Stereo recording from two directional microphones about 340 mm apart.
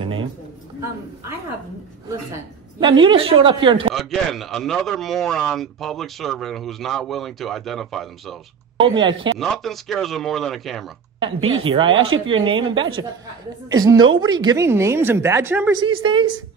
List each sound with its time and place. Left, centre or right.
0.0 s a sound: centre
2.8 s speech: centre
3.9 s speech: centre
8.7 s speech: centre
9.4 s speech: centre
11.1 s speech: centre
11.9 s speech: right
12.3 s speech: centre